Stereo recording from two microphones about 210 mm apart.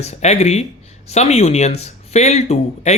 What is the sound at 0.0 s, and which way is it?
Speech, 30° left (ahead or behind).